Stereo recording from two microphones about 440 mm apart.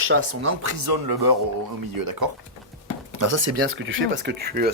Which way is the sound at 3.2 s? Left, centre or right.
Right.